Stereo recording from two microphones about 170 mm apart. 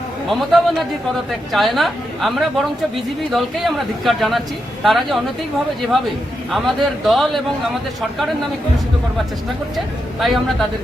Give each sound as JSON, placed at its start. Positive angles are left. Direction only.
{"t": 0.3, "sound": "a woman's voice", "side_deg": 0}
{"t": 6.5, "sound": "a woman's voice", "side_deg": 0}
{"t": 9.7, "sound": "a woman's voice", "side_deg": 0}